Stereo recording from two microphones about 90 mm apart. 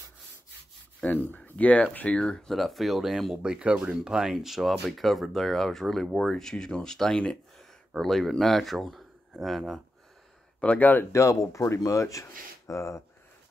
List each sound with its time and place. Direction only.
1.3 s speech: 20° left (ahead or behind); by 9.8 s centre (ahead or behind)
10.6 s speech: 15° left (ahead or behind)
11.1 s speech: 35° left (ahead or behind)